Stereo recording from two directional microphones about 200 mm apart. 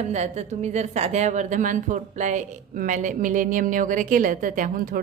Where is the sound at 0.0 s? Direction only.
35° right (ahead or behind).